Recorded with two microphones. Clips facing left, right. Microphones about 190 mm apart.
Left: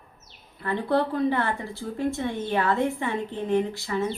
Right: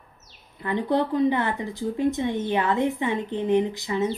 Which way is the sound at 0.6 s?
15° right (ahead or behind).